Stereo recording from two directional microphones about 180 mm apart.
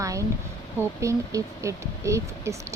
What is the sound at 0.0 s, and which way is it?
Speech, 15° right (ahead or behind).